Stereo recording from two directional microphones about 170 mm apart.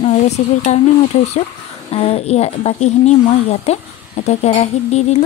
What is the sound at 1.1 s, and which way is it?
Speech, 40° left (ahead or behind).